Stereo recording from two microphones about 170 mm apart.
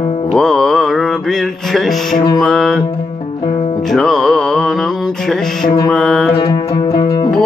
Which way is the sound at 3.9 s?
Centre (ahead or behind).